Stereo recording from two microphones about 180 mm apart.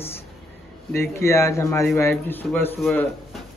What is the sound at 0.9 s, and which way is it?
Speech, 15° left (ahead or behind).